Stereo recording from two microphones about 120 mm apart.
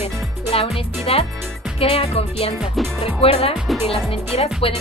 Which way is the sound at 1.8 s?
55° left (ahead or behind).